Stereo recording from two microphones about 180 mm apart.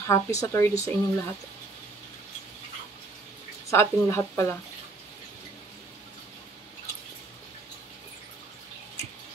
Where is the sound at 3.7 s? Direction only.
15° left (ahead or behind).